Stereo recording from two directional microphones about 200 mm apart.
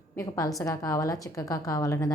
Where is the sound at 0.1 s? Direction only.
15° left (ahead or behind).